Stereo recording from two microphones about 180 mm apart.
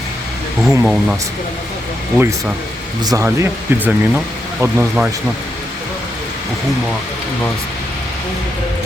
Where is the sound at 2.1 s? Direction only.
10° right (ahead or behind).